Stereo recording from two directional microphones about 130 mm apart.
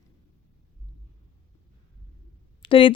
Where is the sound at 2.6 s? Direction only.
40° left (ahead or behind).